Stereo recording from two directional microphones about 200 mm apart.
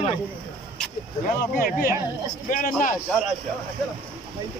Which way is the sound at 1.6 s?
45° left (ahead or behind).